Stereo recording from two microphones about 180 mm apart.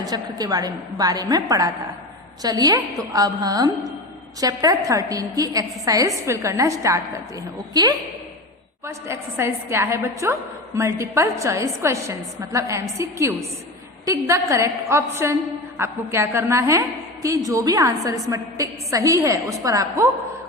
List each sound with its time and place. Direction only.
0.0 s a woman's voice: 20° right (ahead or behind)